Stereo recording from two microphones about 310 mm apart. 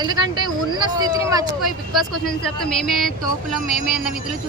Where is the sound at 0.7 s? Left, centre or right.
Centre.